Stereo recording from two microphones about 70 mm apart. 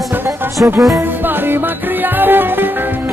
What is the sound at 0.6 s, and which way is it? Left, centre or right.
Music, right.